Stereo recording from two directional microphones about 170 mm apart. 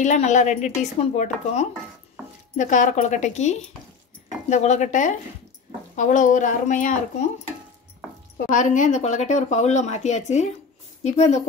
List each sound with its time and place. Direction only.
0.0 s speech: 45° left (ahead or behind)
8.5 s speech: 45° left (ahead or behind)